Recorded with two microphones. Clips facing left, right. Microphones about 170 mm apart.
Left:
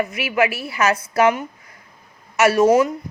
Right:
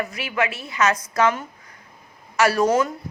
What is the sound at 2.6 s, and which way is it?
Speech, 10° left (ahead or behind).